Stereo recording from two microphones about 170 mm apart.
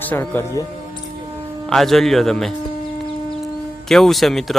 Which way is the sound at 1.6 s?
Centre (ahead or behind).